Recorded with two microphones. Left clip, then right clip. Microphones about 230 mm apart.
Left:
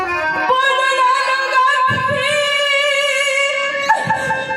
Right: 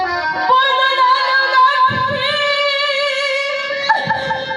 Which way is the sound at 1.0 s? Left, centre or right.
Left.